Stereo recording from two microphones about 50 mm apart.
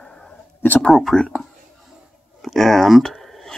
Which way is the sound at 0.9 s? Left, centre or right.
Centre.